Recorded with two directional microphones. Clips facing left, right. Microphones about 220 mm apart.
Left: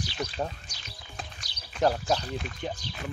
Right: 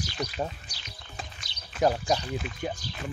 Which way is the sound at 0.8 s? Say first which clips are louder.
Even; 5° left (ahead or behind).